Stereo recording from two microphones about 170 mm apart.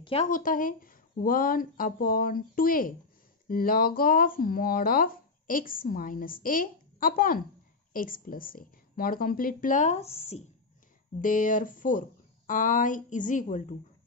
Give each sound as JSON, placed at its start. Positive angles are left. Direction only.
{"t": 0.0, "sound": "speech", "side_deg": 35}
{"t": 0.3, "sound": "speech", "side_deg": 55}
{"t": 11.1, "sound": "speech", "side_deg": 50}